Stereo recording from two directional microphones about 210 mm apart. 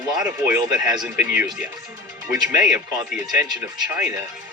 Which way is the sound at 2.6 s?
5° right (ahead or behind).